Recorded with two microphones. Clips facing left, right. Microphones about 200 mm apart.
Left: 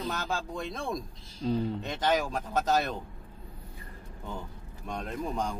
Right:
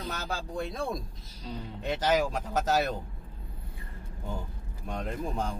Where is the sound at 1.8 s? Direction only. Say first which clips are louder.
Right 2 dB; 5° right (ahead or behind).